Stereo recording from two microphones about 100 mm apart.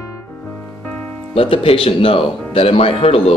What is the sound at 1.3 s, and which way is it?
Speech, 65° left (ahead or behind).